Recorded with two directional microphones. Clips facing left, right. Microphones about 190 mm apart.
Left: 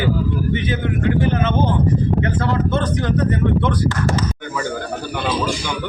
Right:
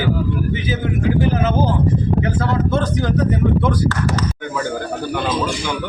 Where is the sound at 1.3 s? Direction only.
5° right (ahead or behind).